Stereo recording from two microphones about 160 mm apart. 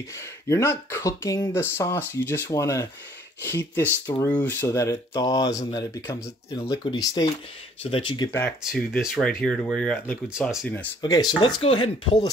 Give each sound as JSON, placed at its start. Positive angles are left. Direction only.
{"t": 0.5, "sound": "speech", "side_deg": 15}
{"t": 8.5, "sound": "speech", "side_deg": 0}
{"t": 11.0, "sound": "speech", "side_deg": 25}